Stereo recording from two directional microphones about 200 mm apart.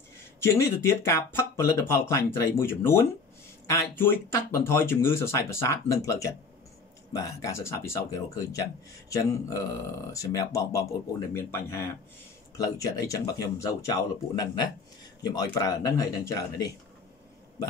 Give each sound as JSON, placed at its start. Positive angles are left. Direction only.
{"t": 0.4, "sound": "speech", "side_deg": 15}